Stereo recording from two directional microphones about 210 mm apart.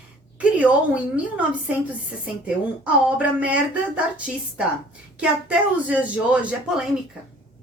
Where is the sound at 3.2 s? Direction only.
5° right (ahead or behind).